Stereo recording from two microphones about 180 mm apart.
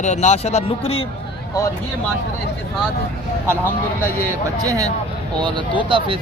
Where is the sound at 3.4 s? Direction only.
15° right (ahead or behind).